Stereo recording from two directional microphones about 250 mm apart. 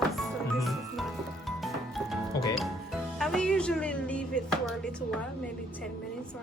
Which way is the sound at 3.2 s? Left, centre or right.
Centre.